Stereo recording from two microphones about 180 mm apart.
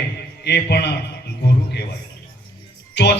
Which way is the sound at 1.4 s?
65° left (ahead or behind).